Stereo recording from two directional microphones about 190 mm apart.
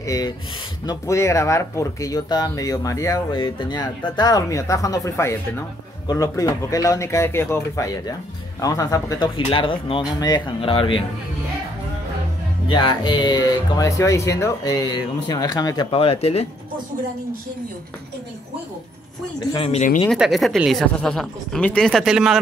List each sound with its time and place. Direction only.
0.0 s speech: 20° left (ahead or behind)
12.6 s speech: 25° left (ahead or behind)
19.4 s speech: 20° left (ahead or behind)
19.7 s speech: 40° left (ahead or behind)
20.1 s speech: centre (ahead or behind)